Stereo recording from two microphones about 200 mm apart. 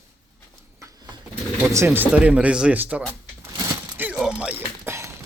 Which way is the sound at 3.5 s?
10° right (ahead or behind).